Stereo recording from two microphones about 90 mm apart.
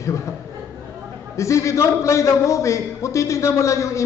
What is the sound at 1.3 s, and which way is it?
A man's voice, 35° left (ahead or behind).